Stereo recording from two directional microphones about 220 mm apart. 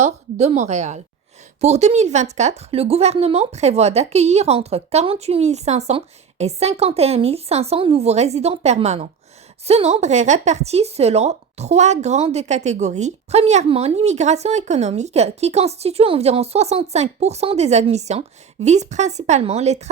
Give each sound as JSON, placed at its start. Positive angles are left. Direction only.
{"t": 0.0, "sound": "a woman's voice", "side_deg": -30}